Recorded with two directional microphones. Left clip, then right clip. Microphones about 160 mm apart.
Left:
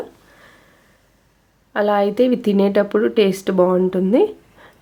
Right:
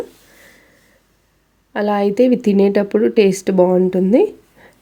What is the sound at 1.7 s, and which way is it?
Speech, 40° right (ahead or behind).